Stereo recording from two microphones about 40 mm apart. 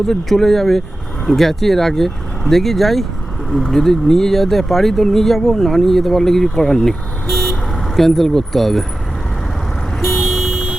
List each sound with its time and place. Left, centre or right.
0.1 s speech: centre
10.0 s vehicle: centre
10.5 s wind chime: centre